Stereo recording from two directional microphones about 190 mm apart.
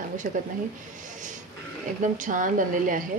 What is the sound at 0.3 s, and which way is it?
Speech, 45° right (ahead or behind).